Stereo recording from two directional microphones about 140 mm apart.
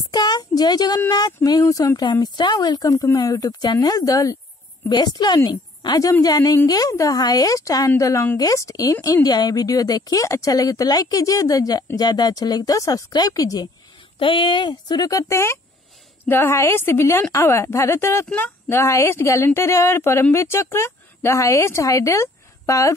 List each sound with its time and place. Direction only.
0.1 s a woman's voice: 30° left (ahead or behind)
14.1 s a woman's voice: 35° left (ahead or behind); by 22.9 s 20° left (ahead or behind)